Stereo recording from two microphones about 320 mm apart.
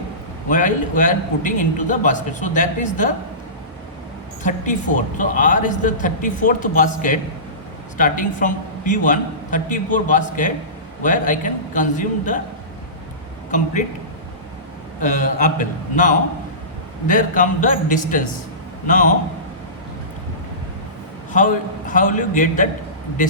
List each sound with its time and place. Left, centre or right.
0.4 s a man's voice: left
4.4 s a man's voice: left
15.0 s a man's voice: left
21.3 s a man's voice: left